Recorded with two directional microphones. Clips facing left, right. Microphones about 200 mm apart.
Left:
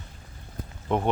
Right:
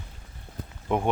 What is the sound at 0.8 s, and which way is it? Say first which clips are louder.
Speech: even; 5° right (ahead or behind).